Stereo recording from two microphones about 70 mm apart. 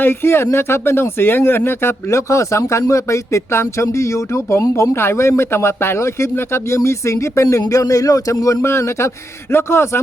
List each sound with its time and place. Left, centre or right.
0.0 s speech: left
8.6 s speech: left